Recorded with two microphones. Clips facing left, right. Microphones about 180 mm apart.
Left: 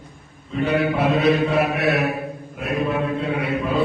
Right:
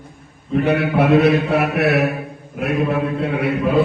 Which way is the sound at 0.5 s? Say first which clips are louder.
Right 4 dB; 65° right (ahead or behind).